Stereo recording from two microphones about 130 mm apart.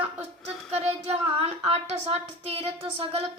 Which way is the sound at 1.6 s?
50° right (ahead or behind).